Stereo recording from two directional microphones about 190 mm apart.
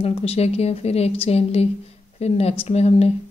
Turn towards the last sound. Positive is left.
turn(degrees=35)  # may be behind; listen again after turning